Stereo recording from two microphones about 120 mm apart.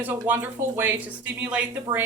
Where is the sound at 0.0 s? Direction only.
15° right (ahead or behind).